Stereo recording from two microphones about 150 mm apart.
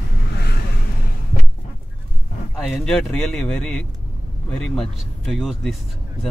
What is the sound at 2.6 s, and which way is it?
A man's voice, 5° left (ahead or behind).